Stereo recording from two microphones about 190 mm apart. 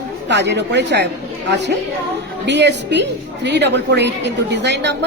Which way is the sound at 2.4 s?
65° right (ahead or behind).